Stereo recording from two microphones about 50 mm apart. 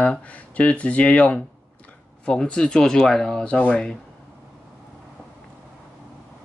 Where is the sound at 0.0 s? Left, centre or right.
Left; by 3.4 s centre.